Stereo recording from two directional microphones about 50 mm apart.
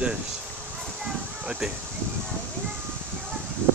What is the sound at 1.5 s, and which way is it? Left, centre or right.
Speech, centre.